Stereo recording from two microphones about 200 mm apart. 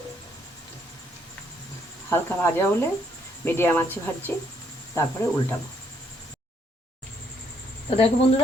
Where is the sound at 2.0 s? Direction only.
10° left (ahead or behind).